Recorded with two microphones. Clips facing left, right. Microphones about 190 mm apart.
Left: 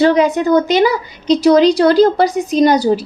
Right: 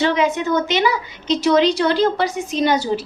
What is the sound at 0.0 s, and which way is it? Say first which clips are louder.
A woman's voice: left 6 dB; 35° left (ahead or behind).